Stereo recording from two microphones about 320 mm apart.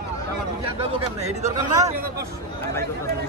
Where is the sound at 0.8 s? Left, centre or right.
Centre.